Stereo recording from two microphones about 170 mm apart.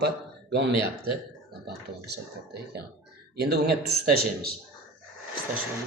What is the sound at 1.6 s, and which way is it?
Speech, 70° right (ahead or behind).